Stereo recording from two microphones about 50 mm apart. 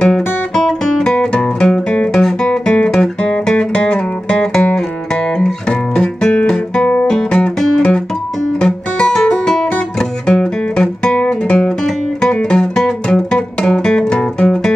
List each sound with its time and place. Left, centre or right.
0.0 s music: centre
3.0 s music: centre
8.5 s guitar: centre
10.3 s music: centre